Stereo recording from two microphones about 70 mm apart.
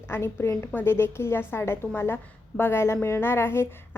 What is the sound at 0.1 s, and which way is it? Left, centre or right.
A woman's voice, left.